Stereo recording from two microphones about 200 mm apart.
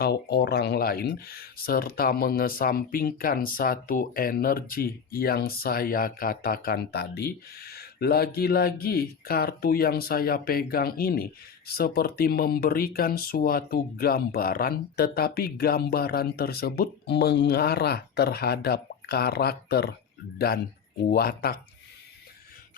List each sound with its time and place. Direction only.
0.0 s speech: 50° left (ahead or behind)
21.1 s speech: 50° left (ahead or behind)